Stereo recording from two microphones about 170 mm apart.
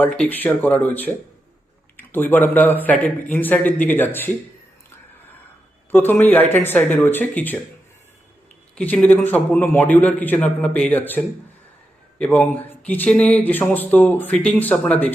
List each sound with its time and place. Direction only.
0.0 s speech: 10° left (ahead or behind)
5.9 s speech: 10° left (ahead or behind)
8.7 s speech: 5° left (ahead or behind)